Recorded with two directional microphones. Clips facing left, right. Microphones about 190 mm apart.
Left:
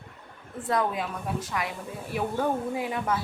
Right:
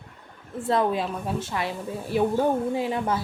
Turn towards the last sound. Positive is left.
turn(degrees=-30)  # may be behind; listen again after turning